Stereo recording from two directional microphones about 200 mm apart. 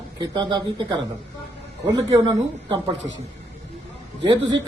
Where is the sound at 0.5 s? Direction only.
20° right (ahead or behind).